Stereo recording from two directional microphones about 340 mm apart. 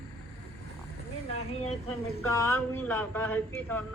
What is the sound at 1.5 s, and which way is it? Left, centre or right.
Speech, centre.